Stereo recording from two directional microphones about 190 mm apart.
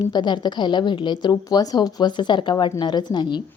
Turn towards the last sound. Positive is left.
turn(degrees=25)  # may be behind; listen again after turning